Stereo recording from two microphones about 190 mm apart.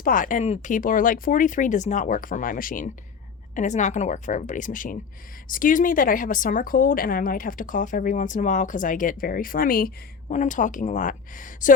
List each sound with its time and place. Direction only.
0.0 s a woman's voice: 45° left (ahead or behind)